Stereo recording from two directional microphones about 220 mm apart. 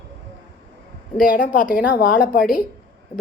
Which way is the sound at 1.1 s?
40° left (ahead or behind).